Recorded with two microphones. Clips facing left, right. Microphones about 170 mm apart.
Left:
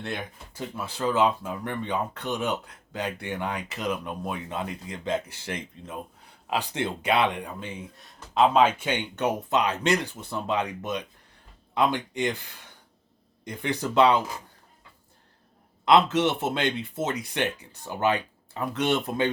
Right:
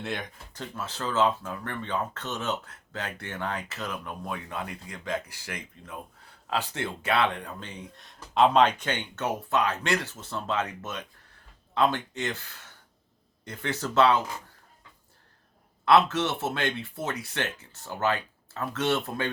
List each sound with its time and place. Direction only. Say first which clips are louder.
0.0 s speech: even; centre (ahead or behind)
15.8 s speech: left 2 dB; 20° left (ahead or behind)